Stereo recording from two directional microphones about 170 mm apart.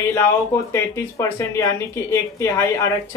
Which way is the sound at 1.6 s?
20° left (ahead or behind).